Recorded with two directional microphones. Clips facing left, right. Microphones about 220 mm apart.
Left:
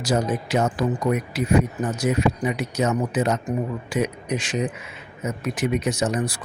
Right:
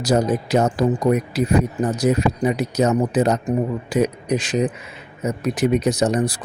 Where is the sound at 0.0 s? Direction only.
40° right (ahead or behind).